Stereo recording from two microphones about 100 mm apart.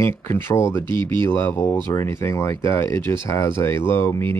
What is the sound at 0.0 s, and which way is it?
Speech, 25° left (ahead or behind).